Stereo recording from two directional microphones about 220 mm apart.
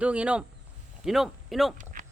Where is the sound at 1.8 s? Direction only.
35° right (ahead or behind).